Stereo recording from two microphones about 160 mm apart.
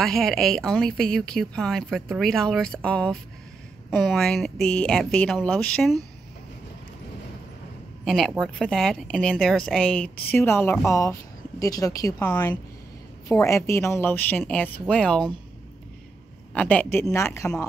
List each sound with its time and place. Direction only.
0.0 s speech: 5° left (ahead or behind)
8.0 s a woman's voice: centre (ahead or behind); by 12.2 s 20° left (ahead or behind)
12.2 s a woman's voice: 10° left (ahead or behind)
16.5 s a woman's voice: 10° left (ahead or behind)